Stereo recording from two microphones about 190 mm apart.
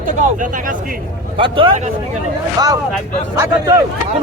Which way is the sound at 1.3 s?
25° right (ahead or behind).